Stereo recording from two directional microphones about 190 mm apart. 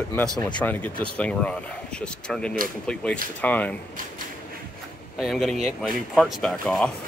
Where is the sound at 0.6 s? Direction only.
10° left (ahead or behind).